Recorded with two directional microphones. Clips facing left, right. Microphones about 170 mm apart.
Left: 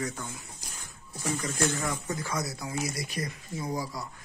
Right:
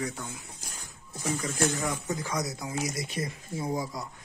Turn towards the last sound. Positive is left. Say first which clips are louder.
# right 2 dB
turn(degrees=-25)  # may be behind; listen again after turning